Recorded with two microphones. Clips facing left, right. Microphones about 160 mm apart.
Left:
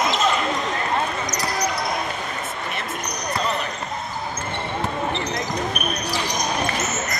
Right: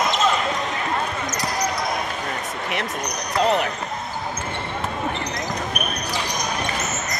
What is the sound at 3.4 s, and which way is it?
Basketball bounce, 75° right (ahead or behind).